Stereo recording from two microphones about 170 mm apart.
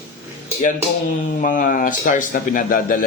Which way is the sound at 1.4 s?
50° left (ahead or behind).